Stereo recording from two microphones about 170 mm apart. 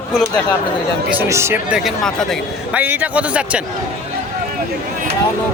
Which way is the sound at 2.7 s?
10° right (ahead or behind).